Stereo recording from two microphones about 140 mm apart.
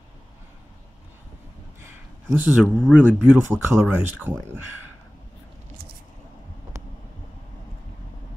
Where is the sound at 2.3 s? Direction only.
10° right (ahead or behind).